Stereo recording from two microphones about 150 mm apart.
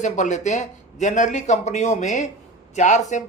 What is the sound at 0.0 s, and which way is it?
Speech, 55° left (ahead or behind).